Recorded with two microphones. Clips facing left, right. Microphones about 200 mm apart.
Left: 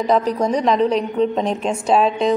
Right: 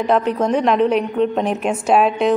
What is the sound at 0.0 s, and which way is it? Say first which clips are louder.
A woman's voice: even; 5° right (ahead or behind).